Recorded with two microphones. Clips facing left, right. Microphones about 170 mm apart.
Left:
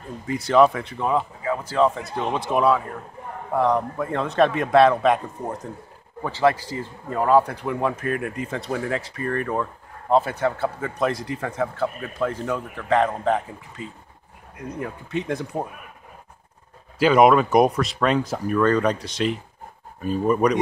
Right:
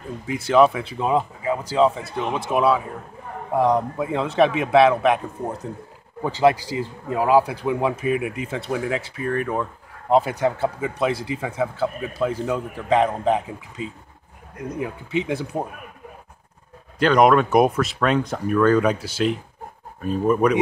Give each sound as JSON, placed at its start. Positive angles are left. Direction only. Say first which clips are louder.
{"t": 0.3, "sound": "speech", "louder": "right 1 dB", "side_deg": -5}
{"t": 0.9, "sound": "a man's voice", "louder": "right 2 dB", "side_deg": -20}
{"t": 2.0, "sound": "a man's voice", "louder": "even", "side_deg": 0}
{"t": 6.2, "sound": "a man's voice", "louder": "right 2 dB", "side_deg": -15}
{"t": 15.2, "sound": "speech", "louder": "right 1 dB", "side_deg": -5}
{"t": 17.0, "sound": "speech", "louder": "even", "side_deg": 5}